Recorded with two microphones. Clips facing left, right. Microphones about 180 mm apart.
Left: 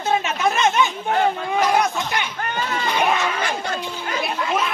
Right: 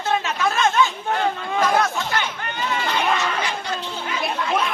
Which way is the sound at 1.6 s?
15° left (ahead or behind).